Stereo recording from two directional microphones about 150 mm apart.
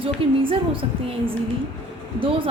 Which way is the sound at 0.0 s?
35° right (ahead or behind).